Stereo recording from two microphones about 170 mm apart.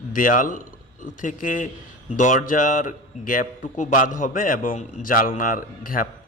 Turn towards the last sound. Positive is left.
turn(degrees=55)  # may be behind; listen again after turning